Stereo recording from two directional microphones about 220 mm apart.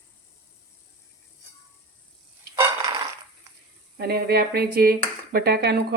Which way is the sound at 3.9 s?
45° right (ahead or behind).